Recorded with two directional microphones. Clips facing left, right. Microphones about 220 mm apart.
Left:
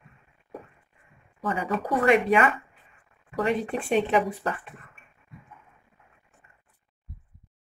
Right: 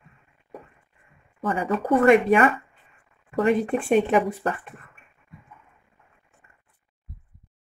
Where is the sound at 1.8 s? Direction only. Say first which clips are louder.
Right 5 dB; 50° right (ahead or behind).